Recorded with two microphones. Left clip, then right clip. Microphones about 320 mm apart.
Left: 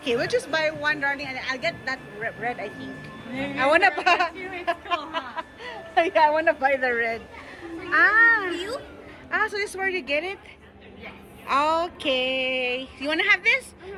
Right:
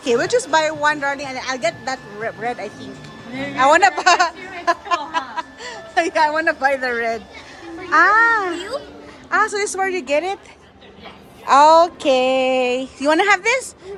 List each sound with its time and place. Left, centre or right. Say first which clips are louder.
0.0 s a woman's voice: right 7 dB; centre
8.5 s a child's voice: right 4 dB; right
9.3 s a woman's voice: right 7 dB; centre
11.4 s a woman's voice: right 12 dB; centre
13.1 s speech: right 3 dB; right